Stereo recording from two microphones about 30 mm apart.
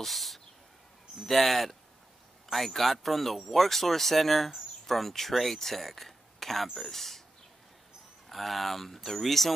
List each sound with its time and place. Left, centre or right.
0.0 s a sound: centre
1.2 s speech: centre
8.3 s speech: centre